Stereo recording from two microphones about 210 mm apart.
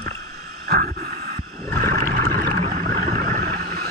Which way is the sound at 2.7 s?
40° right (ahead or behind).